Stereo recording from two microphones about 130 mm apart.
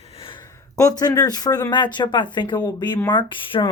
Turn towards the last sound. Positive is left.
turn(degrees=40)  # may be behind; listen again after turning